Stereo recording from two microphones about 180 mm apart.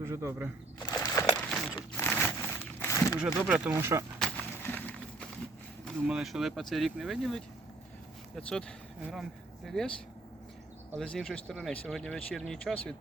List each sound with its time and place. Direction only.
0.0 s speech: 15° right (ahead or behind)
0.9 s a sound: 20° left (ahead or behind)
2.0 s crumpling: 10° left (ahead or behind)
3.2 s speech: 5° right (ahead or behind)
4.2 s a sound: 10° left (ahead or behind)
5.8 s speech: centre (ahead or behind)
11.0 s speech: 5° left (ahead or behind)